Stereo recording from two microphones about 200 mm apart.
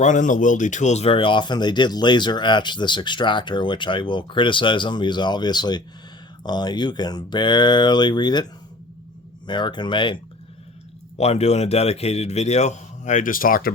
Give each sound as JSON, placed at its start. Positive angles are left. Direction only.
{"t": 0.0, "sound": "speech", "side_deg": 40}
{"t": 9.5, "sound": "speech", "side_deg": 20}
{"t": 11.2, "sound": "a man's voice", "side_deg": 30}